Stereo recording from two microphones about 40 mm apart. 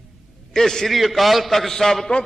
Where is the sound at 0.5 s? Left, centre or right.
Centre.